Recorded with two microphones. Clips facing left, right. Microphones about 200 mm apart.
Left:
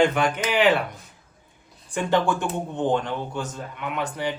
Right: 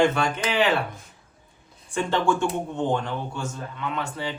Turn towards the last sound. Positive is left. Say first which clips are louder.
# left 2 dB
turn(degrees=15)  # may be behind; listen again after turning